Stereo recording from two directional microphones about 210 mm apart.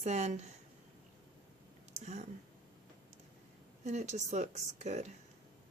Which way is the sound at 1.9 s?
30° right (ahead or behind).